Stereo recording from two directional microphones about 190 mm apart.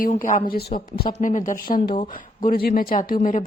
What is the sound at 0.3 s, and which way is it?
Speech, 50° left (ahead or behind).